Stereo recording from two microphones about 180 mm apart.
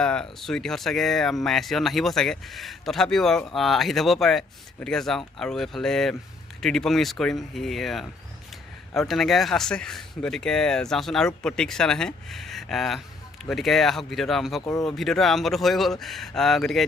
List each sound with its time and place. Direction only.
0.0 s speech: 5° left (ahead or behind)